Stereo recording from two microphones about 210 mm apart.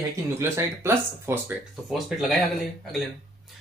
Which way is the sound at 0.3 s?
10° right (ahead or behind).